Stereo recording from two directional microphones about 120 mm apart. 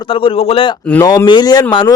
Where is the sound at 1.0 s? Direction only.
35° left (ahead or behind).